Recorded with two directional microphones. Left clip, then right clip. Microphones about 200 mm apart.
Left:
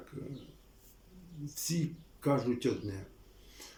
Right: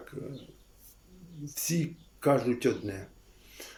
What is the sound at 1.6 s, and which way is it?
Speech, 15° left (ahead or behind).